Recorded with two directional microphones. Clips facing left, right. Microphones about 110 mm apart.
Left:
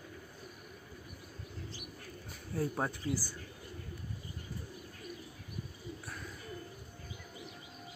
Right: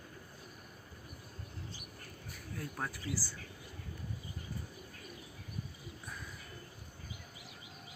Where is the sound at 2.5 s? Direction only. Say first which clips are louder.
Left 7 dB; 25° left (ahead or behind).